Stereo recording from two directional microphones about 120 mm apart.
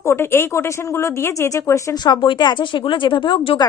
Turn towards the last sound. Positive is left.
turn(degrees=45)  # may be behind; listen again after turning